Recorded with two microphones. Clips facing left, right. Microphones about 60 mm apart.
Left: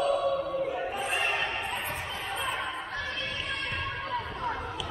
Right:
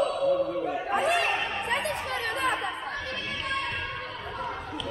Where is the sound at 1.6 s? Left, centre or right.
Right.